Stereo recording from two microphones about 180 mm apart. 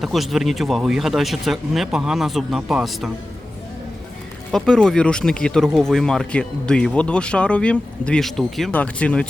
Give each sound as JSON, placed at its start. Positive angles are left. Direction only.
{"t": 0.0, "sound": "speech", "side_deg": 0}
{"t": 4.5, "sound": "speech", "side_deg": 5}